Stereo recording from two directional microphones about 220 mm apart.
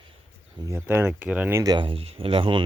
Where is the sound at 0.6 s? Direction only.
10° right (ahead or behind).